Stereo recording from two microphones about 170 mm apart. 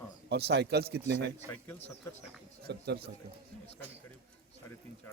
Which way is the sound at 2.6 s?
75° right (ahead or behind).